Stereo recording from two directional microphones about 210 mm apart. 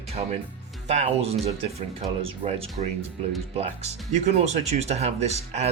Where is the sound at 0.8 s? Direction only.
35° right (ahead or behind).